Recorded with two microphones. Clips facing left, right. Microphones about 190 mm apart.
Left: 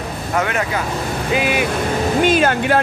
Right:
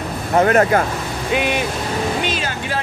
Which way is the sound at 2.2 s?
55° left (ahead or behind).